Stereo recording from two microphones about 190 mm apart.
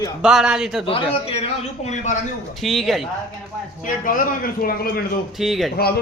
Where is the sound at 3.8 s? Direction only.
45° left (ahead or behind).